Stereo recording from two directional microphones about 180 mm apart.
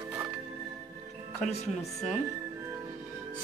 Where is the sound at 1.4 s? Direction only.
40° left (ahead or behind).